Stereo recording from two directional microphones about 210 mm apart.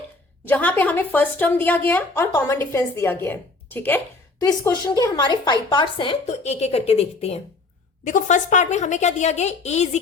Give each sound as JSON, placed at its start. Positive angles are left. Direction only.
{"t": 0.4, "sound": "a woman's voice", "side_deg": 10}